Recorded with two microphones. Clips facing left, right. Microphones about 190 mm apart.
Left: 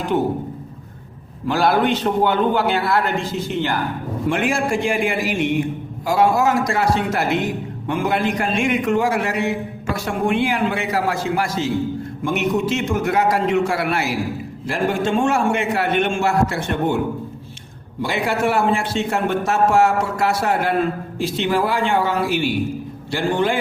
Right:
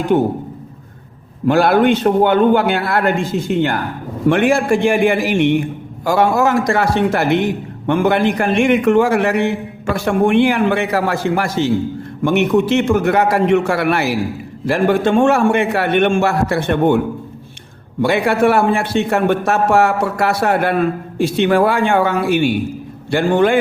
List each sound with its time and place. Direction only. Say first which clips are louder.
1.5 s a man's voice: right 5 dB; 60° right (ahead or behind)
18.0 s a man's voice: right 7 dB; 60° right (ahead or behind)